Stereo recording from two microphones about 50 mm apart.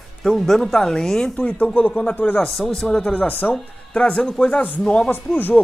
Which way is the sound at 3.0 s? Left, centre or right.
Left.